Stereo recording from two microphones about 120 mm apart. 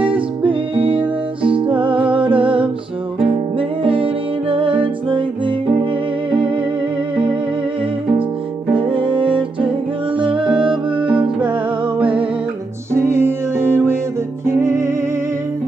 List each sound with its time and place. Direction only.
0.0 s music: 45° right (ahead or behind)
8.7 s music: 45° right (ahead or behind)
12.9 s music: 20° right (ahead or behind)